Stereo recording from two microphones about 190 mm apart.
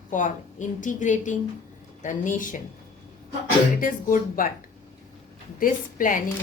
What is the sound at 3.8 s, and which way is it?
Speech, 45° left (ahead or behind).